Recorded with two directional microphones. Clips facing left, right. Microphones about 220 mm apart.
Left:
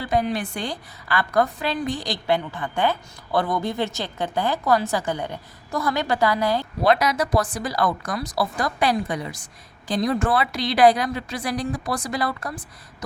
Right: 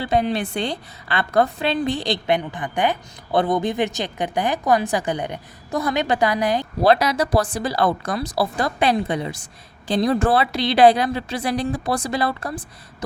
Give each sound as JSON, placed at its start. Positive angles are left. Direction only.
{"t": 0.0, "sound": "a woman's voice", "side_deg": -25}
{"t": 6.8, "sound": "a woman's voice", "side_deg": -30}